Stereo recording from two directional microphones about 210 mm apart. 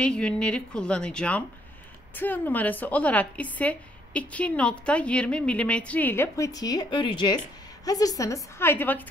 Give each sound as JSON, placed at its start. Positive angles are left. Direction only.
{"t": 0.0, "sound": "a woman's voice", "side_deg": 5}